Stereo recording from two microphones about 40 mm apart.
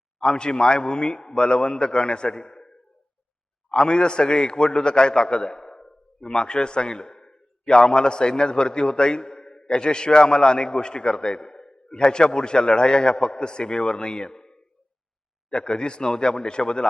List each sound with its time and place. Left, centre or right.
0.2 s a man's voice: left